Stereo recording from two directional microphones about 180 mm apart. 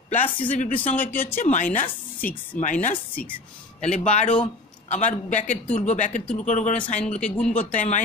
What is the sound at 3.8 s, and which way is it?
Speech, 40° left (ahead or behind).